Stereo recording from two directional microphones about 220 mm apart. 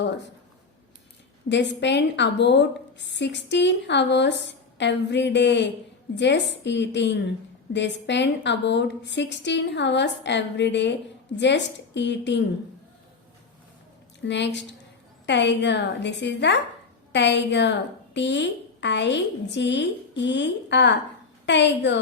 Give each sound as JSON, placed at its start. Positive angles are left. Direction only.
{"t": 1.5, "sound": "a woman's voice", "side_deg": 55}
{"t": 14.3, "sound": "a woman's voice", "side_deg": 55}